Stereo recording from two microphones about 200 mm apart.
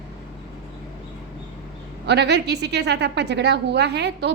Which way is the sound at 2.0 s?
60° right (ahead or behind).